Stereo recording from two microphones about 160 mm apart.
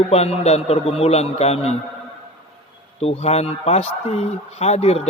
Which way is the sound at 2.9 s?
40° left (ahead or behind).